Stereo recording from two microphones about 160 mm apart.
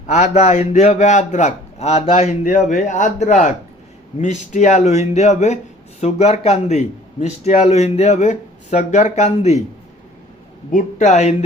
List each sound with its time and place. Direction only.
0.1 s a man's voice: 45° left (ahead or behind)
10.7 s a man's voice: 55° left (ahead or behind)